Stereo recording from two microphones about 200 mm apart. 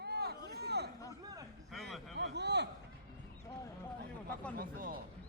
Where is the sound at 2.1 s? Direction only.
60° right (ahead or behind).